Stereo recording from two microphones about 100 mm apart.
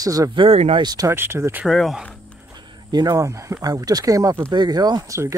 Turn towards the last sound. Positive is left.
turn(degrees=-30)  # may be behind; listen again after turning